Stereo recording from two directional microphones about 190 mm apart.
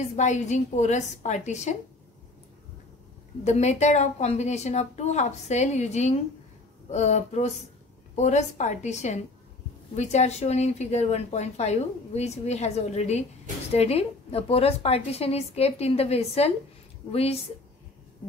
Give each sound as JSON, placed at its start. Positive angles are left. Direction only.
{"t": 0.1, "sound": "speech", "side_deg": 40}
{"t": 3.4, "sound": "speech", "side_deg": 35}